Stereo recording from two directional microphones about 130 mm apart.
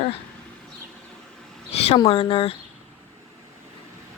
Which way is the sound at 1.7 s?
55° left (ahead or behind).